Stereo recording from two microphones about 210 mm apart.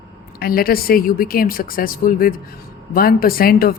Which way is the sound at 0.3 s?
45° left (ahead or behind).